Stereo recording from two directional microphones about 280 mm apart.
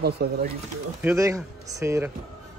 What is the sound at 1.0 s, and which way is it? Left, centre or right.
A man's voice, centre.